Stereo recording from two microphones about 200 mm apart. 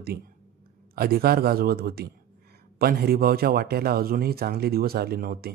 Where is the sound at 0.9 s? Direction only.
50° right (ahead or behind).